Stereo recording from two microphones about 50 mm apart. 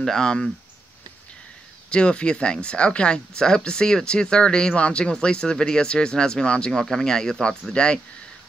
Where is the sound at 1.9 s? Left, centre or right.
Left.